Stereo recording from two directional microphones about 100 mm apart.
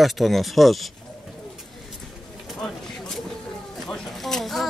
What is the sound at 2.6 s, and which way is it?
Bird, 5° left (ahead or behind).